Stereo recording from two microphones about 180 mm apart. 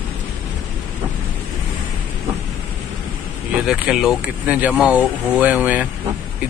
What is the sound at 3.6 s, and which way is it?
Speech, centre (ahead or behind).